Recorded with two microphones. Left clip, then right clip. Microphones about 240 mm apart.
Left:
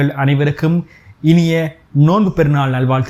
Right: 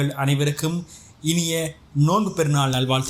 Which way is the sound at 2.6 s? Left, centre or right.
Left.